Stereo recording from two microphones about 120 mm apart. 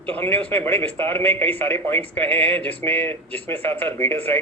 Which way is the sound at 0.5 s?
15° left (ahead or behind).